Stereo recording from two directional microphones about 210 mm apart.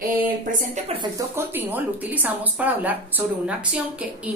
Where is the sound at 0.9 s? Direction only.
20° right (ahead or behind).